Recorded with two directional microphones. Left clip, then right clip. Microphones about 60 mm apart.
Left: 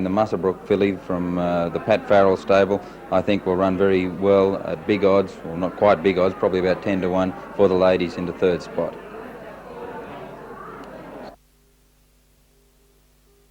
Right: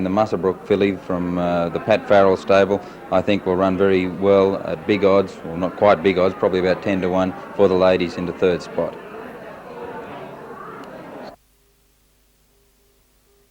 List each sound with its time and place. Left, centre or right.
0.0 s a man's voice: right